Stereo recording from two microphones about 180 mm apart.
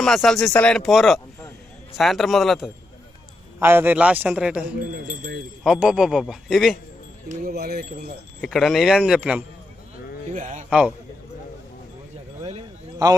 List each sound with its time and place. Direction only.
0.0 s speech: centre (ahead or behind)
3.6 s a man's voice: 10° right (ahead or behind)
5.0 s wind chime: 45° right (ahead or behind)
5.6 s speech: 5° right (ahead or behind)
7.3 s speech: 55° right (ahead or behind)
8.4 s speech: centre (ahead or behind)
10.3 s wind chime: 45° right (ahead or behind)
10.7 s a man's voice: 5° right (ahead or behind)
12.4 s a sound: 35° right (ahead or behind)